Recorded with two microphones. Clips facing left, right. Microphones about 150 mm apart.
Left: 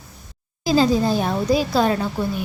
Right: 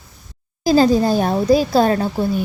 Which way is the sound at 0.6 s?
45° right (ahead or behind).